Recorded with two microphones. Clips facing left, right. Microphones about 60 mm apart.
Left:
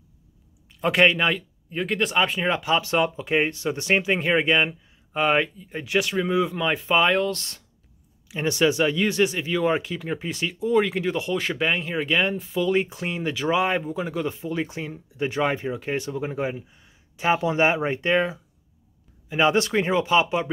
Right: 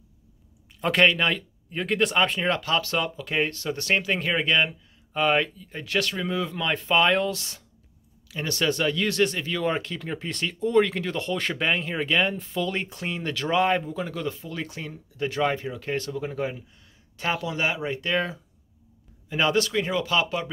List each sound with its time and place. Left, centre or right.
0.7 s speech: centre
2.6 s speech: centre
8.3 s speech: centre
19.2 s speech: centre
19.5 s speech: left